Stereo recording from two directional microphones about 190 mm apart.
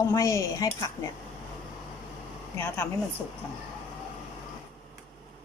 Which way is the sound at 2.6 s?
10° left (ahead or behind).